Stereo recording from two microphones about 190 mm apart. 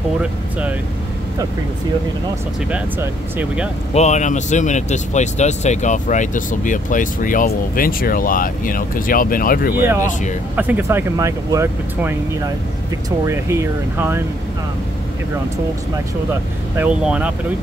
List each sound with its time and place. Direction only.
0.2 s speech: 5° right (ahead or behind)
2.7 s speech: 10° right (ahead or behind)
3.9 s speech: 35° left (ahead or behind)
10.5 s speech: 10° right (ahead or behind)
16.7 s speech: 5° right (ahead or behind)